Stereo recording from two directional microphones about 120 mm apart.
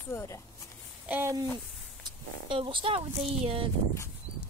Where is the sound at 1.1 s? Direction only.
20° right (ahead or behind).